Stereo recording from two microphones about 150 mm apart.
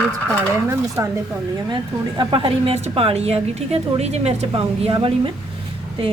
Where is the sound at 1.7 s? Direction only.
35° right (ahead or behind).